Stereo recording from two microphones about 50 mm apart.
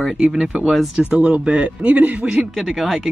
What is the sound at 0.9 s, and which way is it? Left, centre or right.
Speech, right.